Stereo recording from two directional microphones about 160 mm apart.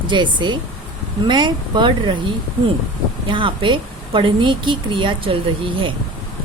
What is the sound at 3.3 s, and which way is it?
Speech, 30° right (ahead or behind).